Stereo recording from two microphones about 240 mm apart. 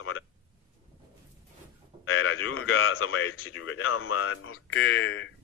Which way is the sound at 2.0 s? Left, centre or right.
Left.